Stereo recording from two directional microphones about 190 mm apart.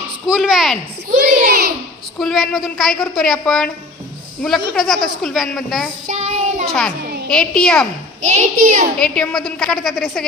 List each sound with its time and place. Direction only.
0.3 s a woman's voice: centre (ahead or behind)
1.3 s a child's voice: 50° right (ahead or behind)
2.1 s a woman's voice: centre (ahead or behind)
6.0 s child singing: 35° right (ahead or behind)
7.2 s a woman's voice: 5° left (ahead or behind)
8.2 s a woman's voice: 40° right (ahead or behind)
8.9 s a woman's voice: 5° left (ahead or behind)